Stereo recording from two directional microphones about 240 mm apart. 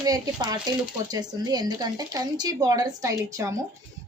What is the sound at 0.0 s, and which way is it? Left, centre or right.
Speech, centre.